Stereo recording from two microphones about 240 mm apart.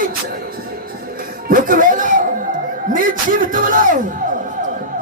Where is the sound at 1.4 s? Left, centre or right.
Right.